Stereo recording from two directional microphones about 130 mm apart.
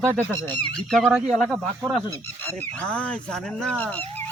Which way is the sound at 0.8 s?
5° left (ahead or behind).